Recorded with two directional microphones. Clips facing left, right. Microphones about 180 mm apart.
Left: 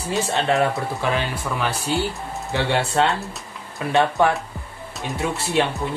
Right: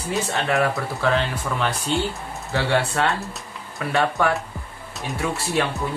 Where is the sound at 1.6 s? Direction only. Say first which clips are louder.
Even; 5° left (ahead or behind).